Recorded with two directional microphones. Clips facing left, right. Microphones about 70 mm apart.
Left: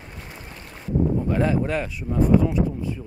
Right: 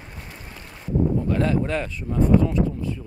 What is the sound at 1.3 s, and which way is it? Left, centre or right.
Speech, centre.